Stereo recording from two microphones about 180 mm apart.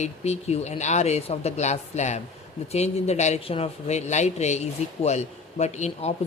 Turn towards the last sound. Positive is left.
turn(degrees=40)  # may be behind; listen again after turning